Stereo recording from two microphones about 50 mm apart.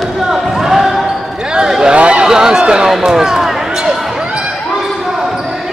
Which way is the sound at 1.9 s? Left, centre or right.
Right.